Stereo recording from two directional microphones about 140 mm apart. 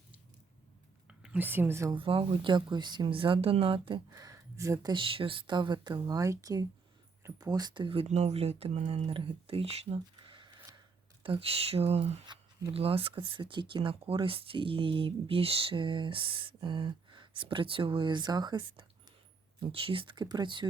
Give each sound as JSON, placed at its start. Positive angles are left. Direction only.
{"t": 1.0, "sound": "a woman's voice", "side_deg": -5}
{"t": 1.9, "sound": "speech", "side_deg": -40}